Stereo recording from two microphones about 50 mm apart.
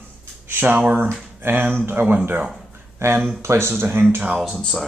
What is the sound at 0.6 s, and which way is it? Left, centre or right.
Speech, right.